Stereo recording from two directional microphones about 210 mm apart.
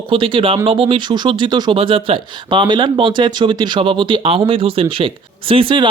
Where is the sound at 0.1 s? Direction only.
25° right (ahead or behind).